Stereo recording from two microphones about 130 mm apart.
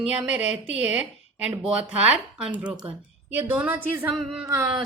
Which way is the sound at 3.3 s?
15° right (ahead or behind).